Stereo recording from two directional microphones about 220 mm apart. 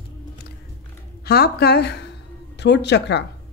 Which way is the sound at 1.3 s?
45° left (ahead or behind).